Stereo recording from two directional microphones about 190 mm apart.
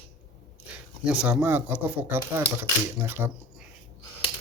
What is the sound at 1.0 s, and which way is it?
Speech, 5° right (ahead or behind).